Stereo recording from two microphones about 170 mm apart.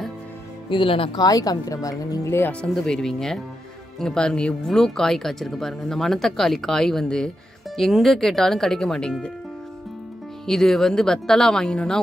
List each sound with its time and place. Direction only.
0.7 s a woman's voice: 30° left (ahead or behind); by 9.3 s 5° left (ahead or behind)
10.4 s speech: centre (ahead or behind)